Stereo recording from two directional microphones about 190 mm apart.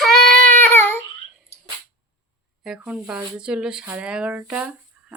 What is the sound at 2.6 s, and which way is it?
Speech, 5° right (ahead or behind).